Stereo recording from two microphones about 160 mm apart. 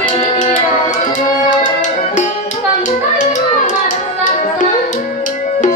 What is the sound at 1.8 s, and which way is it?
Music, 50° left (ahead or behind).